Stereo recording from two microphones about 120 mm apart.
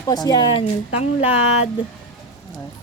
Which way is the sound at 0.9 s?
60° left (ahead or behind).